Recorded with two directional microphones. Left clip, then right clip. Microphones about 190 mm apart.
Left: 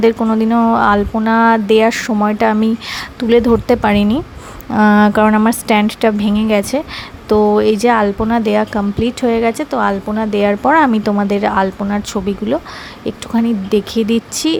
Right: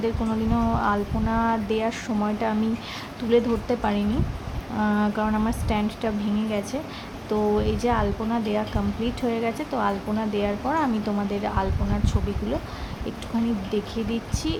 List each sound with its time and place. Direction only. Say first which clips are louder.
0.0 s speech: left 13 dB; 45° left (ahead or behind)